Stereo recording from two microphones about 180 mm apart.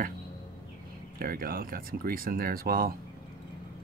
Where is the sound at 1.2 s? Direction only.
55° right (ahead or behind).